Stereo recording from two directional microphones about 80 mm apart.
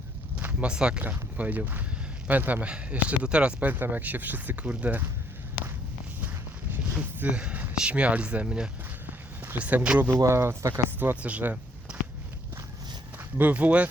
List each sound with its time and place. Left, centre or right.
0.3 s speech: centre
1.0 s speech: right
6.9 s speech: centre
10.2 s speech: right
11.0 s speech: centre
13.4 s speech: centre